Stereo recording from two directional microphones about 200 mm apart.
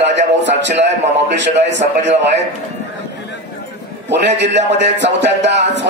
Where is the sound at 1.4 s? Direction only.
60° right (ahead or behind).